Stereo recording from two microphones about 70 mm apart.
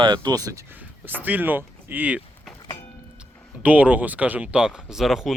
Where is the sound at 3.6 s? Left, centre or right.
Right; by 5.3 s centre.